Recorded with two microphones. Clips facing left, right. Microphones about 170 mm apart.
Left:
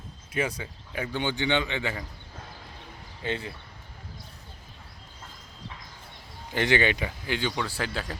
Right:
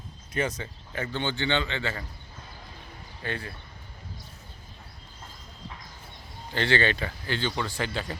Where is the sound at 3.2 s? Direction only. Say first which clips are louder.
Left 3 dB; 20° left (ahead or behind).